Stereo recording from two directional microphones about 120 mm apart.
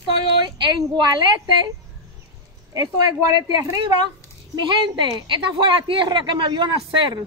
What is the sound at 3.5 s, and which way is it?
A woman's voice, 35° right (ahead or behind).